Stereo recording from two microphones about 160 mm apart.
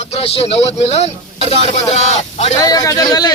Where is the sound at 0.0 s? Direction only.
40° left (ahead or behind).